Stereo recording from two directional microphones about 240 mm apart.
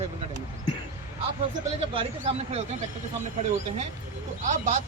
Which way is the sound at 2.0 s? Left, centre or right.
Right.